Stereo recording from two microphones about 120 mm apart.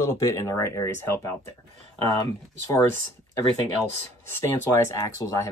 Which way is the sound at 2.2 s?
25° left (ahead or behind).